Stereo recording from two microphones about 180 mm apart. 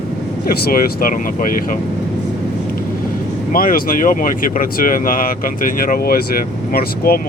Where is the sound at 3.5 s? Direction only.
50° left (ahead or behind).